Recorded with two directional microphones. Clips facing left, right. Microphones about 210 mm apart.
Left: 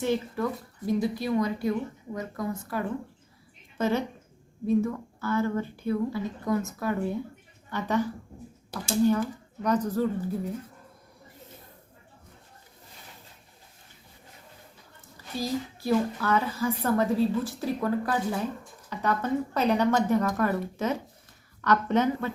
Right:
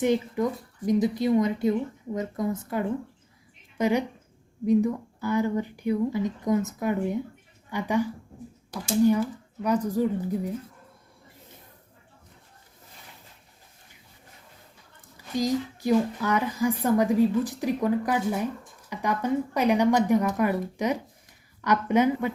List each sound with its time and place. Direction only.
0.0 s a woman's voice: 20° right (ahead or behind)
9.6 s a woman's voice: 10° right (ahead or behind)
15.4 s a woman's voice: 15° right (ahead or behind)